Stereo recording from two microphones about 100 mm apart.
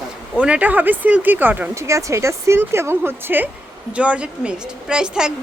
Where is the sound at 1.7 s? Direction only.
30° right (ahead or behind).